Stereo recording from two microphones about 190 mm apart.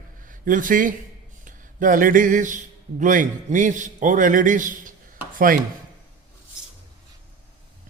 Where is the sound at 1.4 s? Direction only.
45° right (ahead or behind).